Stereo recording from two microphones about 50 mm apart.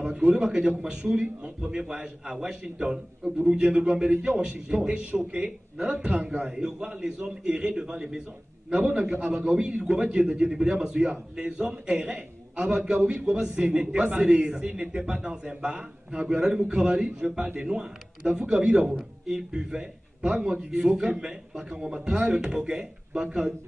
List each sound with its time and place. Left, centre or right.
0.0 s a man's voice: right
0.8 s a man's voice: centre
3.6 s a man's voice: right
6.5 s a man's voice: centre
18.9 s a man's voice: centre